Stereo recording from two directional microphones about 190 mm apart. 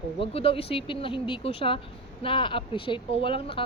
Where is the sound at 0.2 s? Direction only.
30° left (ahead or behind).